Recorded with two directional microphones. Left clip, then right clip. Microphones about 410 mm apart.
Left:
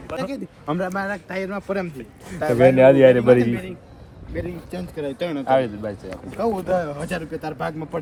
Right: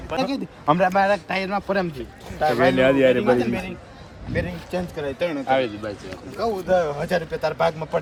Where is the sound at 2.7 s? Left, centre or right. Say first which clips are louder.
Left 7 dB; centre.